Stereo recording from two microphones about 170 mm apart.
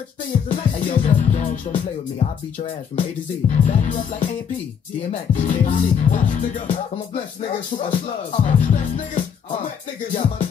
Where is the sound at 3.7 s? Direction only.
50° left (ahead or behind).